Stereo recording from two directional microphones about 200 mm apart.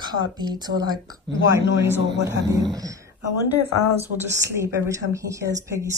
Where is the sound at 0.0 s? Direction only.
20° right (ahead or behind).